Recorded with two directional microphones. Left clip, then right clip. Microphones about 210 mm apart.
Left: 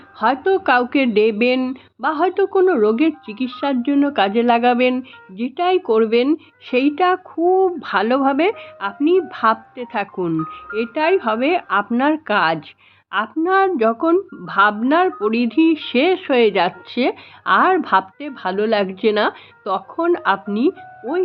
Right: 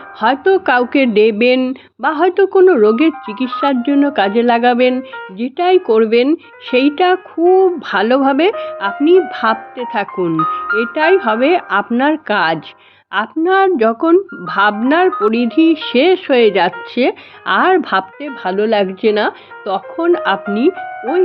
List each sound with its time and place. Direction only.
0.2 s speech: 20° right (ahead or behind)
10.3 s speech: 50° right (ahead or behind)
10.8 s speech: 20° right (ahead or behind)